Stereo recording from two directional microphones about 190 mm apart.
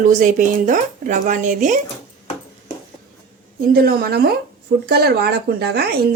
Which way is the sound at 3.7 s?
55° right (ahead or behind).